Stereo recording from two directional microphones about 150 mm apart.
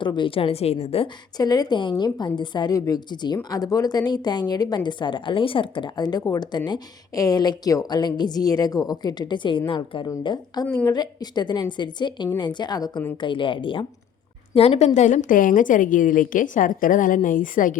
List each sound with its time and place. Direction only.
0.0 s a woman's voice: 30° left (ahead or behind)
1.4 s a woman's voice: 25° left (ahead or behind); by 17.7 s 65° left (ahead or behind)